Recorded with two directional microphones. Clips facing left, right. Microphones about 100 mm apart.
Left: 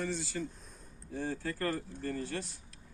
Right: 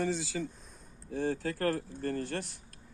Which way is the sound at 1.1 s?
65° right (ahead or behind).